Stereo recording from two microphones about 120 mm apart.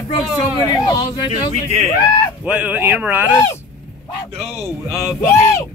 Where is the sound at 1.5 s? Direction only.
70° right (ahead or behind).